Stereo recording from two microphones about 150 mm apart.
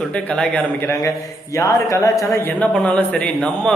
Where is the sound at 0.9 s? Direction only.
20° left (ahead or behind).